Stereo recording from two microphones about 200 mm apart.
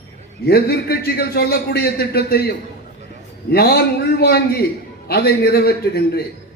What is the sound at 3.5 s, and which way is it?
A man's voice, 55° left (ahead or behind).